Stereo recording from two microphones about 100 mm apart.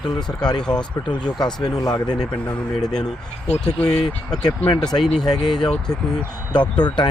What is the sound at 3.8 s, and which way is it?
Speech, 5° left (ahead or behind).